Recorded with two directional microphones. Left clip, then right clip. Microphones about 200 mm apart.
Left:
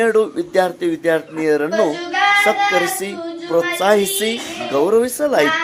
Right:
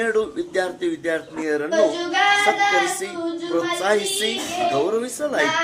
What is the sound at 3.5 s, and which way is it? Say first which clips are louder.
Speech: left 6 dB; 30° left (ahead or behind).